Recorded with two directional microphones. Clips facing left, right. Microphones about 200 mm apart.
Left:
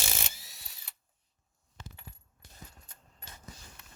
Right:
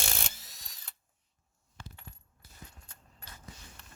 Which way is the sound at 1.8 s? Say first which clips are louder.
Even; 20° left (ahead or behind).